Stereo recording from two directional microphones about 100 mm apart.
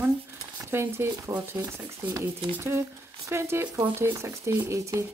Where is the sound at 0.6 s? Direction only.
25° right (ahead or behind).